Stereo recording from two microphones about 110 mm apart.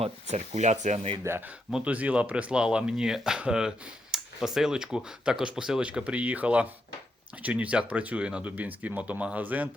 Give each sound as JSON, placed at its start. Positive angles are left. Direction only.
{"t": 0.0, "sound": "speech", "side_deg": -90}
{"t": 1.2, "sound": "speech", "side_deg": -20}
{"t": 1.7, "sound": "speech", "side_deg": -10}